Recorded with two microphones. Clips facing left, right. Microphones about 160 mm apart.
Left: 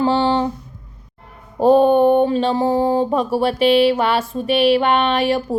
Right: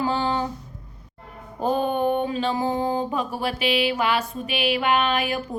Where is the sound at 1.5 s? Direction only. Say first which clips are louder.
Left 11 dB; 30° left (ahead or behind).